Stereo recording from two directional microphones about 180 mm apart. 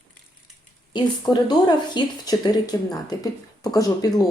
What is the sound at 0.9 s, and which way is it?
Speech, 25° left (ahead or behind).